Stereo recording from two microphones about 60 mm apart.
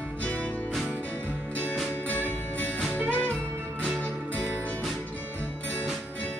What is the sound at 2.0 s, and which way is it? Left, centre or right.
Music, left.